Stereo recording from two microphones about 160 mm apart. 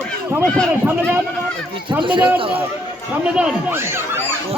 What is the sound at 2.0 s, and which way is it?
Speech, 30° right (ahead or behind).